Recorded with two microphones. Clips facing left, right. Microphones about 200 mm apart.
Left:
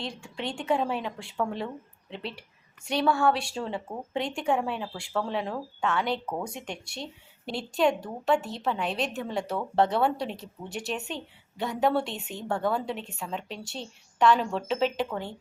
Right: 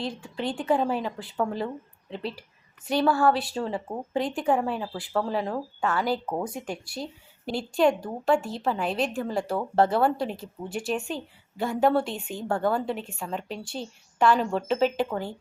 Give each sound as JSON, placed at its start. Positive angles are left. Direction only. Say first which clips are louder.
{"t": 0.2, "sound": "speech", "louder": "right 4 dB", "side_deg": 0}
{"t": 6.2, "sound": "speech", "louder": "right 3 dB", "side_deg": -20}
{"t": 6.5, "sound": "speech", "louder": "right 4 dB", "side_deg": -5}